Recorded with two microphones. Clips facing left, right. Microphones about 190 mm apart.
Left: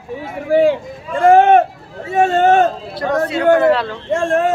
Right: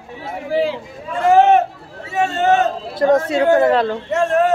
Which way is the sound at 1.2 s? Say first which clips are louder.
Left 3 dB; 50° left (ahead or behind).